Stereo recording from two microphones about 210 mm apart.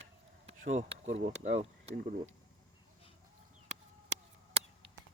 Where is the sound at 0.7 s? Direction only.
35° right (ahead or behind).